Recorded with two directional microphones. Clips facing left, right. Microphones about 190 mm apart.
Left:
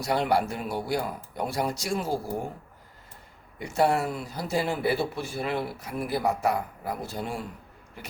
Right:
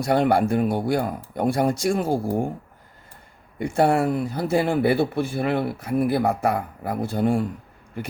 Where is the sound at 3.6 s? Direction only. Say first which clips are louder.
Right 5 dB; 55° right (ahead or behind).